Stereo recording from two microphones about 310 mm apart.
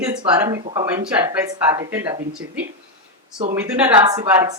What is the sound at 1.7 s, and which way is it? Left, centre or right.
Speech, centre.